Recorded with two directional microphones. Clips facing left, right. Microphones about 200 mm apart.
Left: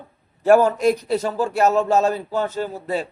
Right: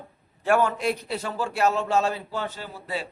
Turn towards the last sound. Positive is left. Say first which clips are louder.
# left 9 dB
turn(degrees=45)  # may be behind; listen again after turning